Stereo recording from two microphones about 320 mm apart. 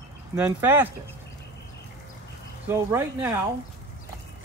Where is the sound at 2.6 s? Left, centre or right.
Centre.